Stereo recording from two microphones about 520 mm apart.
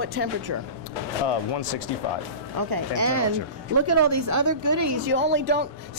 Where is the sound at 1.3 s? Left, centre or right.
Left.